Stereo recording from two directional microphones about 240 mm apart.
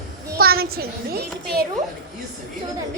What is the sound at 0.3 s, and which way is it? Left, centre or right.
A child's voice, right.